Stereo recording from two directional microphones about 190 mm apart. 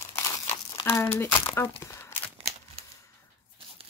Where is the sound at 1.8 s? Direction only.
15° left (ahead or behind).